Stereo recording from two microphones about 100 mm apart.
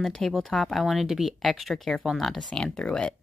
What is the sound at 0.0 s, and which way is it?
Speech, 5° left (ahead or behind).